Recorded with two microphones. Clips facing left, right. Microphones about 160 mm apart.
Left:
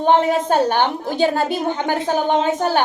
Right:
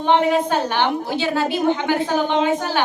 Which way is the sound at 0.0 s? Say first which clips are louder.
Left 1 dB; 45° left (ahead or behind).